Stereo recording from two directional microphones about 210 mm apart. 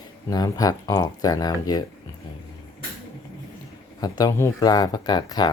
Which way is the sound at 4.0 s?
20° left (ahead or behind).